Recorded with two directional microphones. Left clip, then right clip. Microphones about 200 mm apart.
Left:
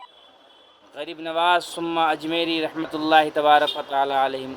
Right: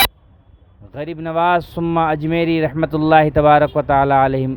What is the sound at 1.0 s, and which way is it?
Speech, 45° right (ahead or behind).